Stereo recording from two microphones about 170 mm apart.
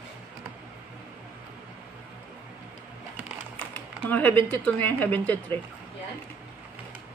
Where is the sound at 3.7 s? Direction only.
10° left (ahead or behind).